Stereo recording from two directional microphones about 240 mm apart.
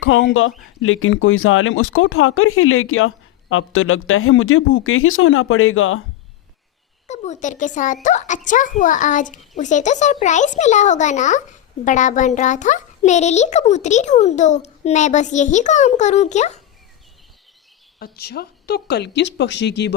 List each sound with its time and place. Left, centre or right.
0.0 s speech: left
7.1 s a child's voice: left
18.0 s speech: left